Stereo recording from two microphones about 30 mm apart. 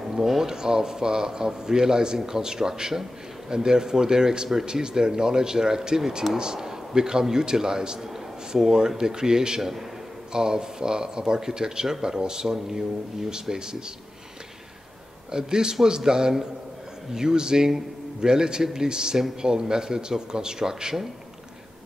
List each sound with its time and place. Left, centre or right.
0.0 s a man's voice: centre
9.6 s a man's voice: centre
10.3 s a man's voice: right
15.3 s a man's voice: right